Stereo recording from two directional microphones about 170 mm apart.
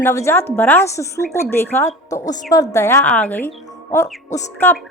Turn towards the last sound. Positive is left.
turn(degrees=15)  # may be behind; listen again after turning